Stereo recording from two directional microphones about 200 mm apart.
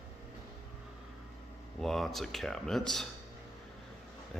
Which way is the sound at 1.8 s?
Centre (ahead or behind).